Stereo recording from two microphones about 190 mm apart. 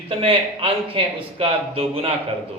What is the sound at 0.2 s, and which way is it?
Speech, 30° right (ahead or behind).